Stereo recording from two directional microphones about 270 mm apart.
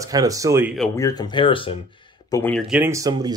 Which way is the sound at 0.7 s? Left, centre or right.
Centre.